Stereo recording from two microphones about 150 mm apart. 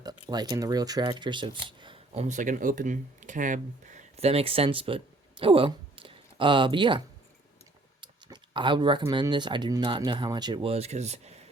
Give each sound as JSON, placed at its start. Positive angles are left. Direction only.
{"t": 0.3, "sound": "speech", "side_deg": -25}
{"t": 2.1, "sound": "speech", "side_deg": -50}
{"t": 8.0, "sound": "speech", "side_deg": -30}